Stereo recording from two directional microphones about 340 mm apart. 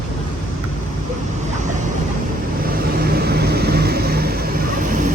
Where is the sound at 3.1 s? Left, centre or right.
Right.